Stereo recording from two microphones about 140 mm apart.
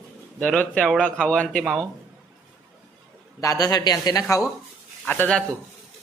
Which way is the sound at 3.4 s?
25° left (ahead or behind).